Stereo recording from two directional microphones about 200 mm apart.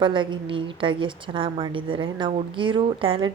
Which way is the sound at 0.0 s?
25° right (ahead or behind).